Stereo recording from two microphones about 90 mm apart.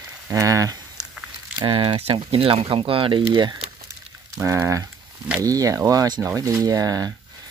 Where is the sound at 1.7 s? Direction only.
75° right (ahead or behind).